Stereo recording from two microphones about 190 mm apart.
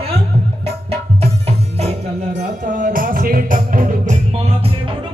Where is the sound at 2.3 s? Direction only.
40° right (ahead or behind).